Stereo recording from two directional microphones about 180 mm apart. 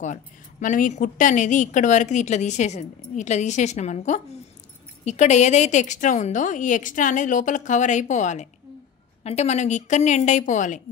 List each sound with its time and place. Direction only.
0.0 s a woman's voice: 45° left (ahead or behind)